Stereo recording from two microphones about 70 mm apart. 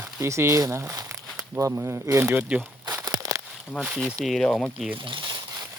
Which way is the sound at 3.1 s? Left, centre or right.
Right.